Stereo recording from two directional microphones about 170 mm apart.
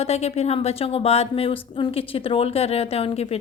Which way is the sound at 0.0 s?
40° left (ahead or behind).